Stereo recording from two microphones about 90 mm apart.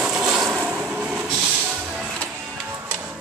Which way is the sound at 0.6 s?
15° right (ahead or behind).